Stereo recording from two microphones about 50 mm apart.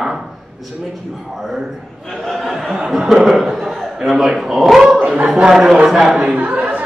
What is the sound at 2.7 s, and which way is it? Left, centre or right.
A man's voice, centre.